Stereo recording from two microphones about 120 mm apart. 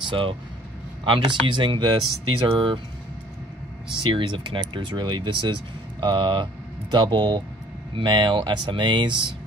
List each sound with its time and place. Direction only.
0.0 s speech: 45° right (ahead or behind)
4.0 s speech: 45° right (ahead or behind)